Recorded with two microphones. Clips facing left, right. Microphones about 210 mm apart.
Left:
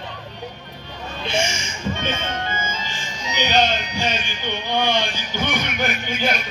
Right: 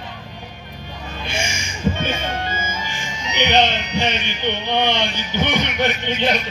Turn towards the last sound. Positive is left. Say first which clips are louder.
# right 3 dB
turn(degrees=-20)  # may be behind; listen again after turning